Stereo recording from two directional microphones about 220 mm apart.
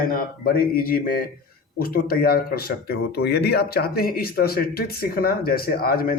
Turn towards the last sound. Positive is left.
turn(degrees=40)  # may be behind; listen again after turning